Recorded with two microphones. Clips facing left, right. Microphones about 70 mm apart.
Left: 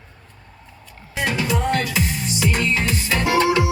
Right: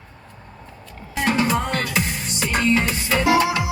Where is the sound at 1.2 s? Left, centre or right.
Right.